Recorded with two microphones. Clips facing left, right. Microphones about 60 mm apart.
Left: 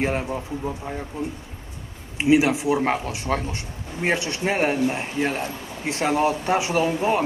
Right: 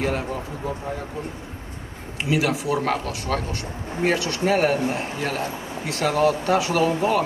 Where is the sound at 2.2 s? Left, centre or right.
Left.